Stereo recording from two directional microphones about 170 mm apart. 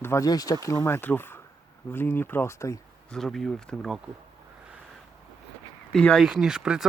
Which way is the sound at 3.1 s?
Centre (ahead or behind).